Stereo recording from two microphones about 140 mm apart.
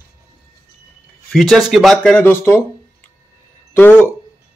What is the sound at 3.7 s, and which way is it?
Speech, 15° left (ahead or behind).